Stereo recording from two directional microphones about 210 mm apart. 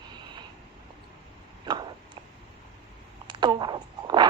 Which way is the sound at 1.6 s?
20° right (ahead or behind).